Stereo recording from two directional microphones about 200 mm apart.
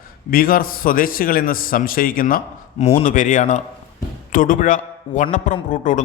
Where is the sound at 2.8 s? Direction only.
30° left (ahead or behind).